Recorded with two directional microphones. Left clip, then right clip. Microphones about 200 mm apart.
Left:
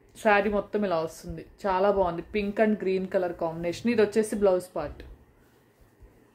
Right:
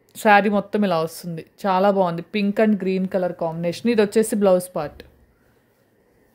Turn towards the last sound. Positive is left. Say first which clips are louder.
# right 7 dB
turn(degrees=-45)  # may be behind; listen again after turning